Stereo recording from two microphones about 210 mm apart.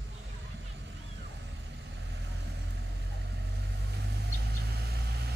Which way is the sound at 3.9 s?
50° right (ahead or behind).